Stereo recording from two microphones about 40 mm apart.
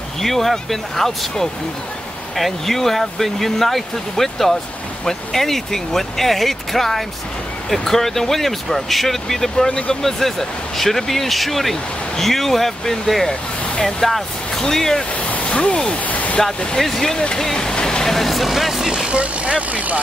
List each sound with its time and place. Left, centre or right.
0.2 s speech: centre
2.3 s speech: centre
15.3 s a sound: left
15.7 s speech: centre
16.1 s a sound: left
16.4 s speech: centre
19.0 s speech: right